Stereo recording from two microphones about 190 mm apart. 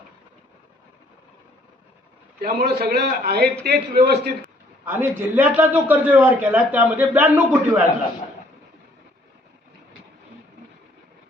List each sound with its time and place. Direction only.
2.4 s a man's voice: 55° right (ahead or behind)
4.9 s a man's voice: 10° right (ahead or behind)